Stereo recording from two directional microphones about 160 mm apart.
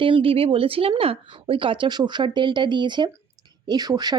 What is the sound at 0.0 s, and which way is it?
Speech, 35° right (ahead or behind).